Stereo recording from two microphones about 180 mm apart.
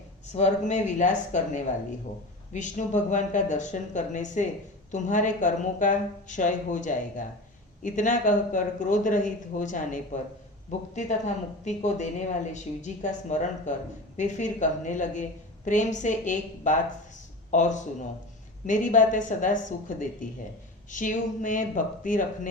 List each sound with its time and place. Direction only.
0.3 s a woman's voice: 40° left (ahead or behind)